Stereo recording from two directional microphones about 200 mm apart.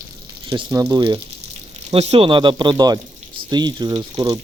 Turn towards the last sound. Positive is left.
turn(degrees=-20)  # may be behind; listen again after turning